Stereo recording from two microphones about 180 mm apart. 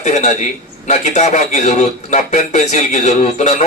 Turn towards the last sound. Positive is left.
turn(degrees=40)  # may be behind; listen again after turning